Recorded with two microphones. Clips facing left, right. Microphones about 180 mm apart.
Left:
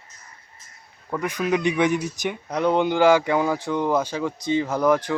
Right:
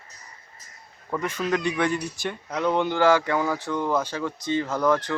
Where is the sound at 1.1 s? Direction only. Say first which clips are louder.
Left 2 dB; 15° left (ahead or behind).